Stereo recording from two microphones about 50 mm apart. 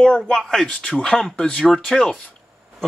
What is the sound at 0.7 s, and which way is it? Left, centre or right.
Speech, left.